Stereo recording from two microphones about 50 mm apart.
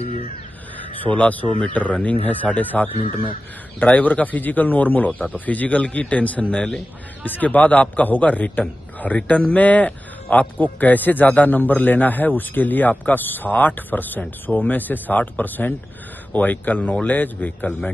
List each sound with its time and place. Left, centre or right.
0.7 s a man's voice: left